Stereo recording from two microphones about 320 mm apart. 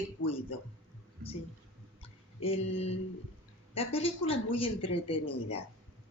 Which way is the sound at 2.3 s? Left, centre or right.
Centre.